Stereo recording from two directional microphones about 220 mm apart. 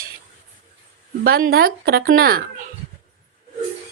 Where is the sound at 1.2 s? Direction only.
45° right (ahead or behind).